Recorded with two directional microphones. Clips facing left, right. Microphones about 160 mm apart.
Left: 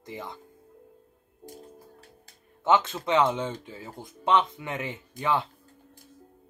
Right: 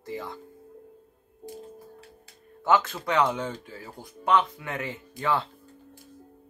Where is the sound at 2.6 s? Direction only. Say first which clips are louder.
Even; 20° left (ahead or behind).